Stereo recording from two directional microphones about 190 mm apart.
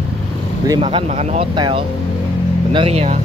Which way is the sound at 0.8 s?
35° right (ahead or behind).